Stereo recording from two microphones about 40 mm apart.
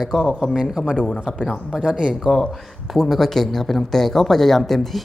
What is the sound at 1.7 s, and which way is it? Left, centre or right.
Speech, centre.